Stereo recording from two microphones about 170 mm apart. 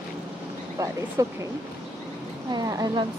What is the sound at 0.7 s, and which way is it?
Speech, 20° right (ahead or behind).